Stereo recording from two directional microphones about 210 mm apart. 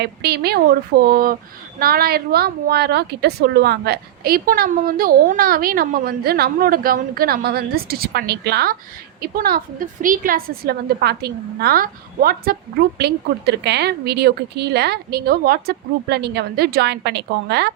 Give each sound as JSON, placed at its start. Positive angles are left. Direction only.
{"t": 0.0, "sound": "a woman's voice", "side_deg": -50}